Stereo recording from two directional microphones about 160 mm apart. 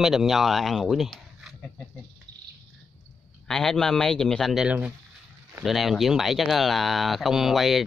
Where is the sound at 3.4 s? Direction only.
Centre (ahead or behind).